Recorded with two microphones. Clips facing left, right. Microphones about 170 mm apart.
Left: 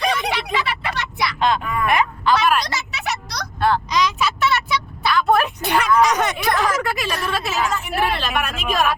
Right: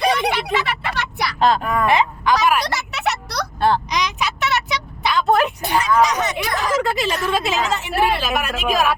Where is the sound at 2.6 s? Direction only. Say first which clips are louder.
Right 4 dB; 60° right (ahead or behind).